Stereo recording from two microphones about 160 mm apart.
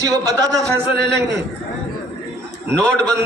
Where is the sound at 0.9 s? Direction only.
90° right.